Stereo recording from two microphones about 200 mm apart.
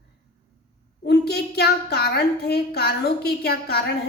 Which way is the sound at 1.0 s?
55° left (ahead or behind).